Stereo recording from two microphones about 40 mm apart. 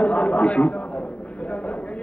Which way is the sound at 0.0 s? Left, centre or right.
Left.